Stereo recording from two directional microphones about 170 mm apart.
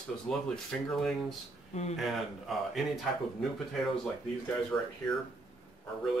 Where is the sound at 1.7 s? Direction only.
40° left (ahead or behind).